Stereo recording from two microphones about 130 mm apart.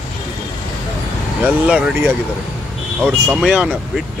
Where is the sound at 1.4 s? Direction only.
10° right (ahead or behind).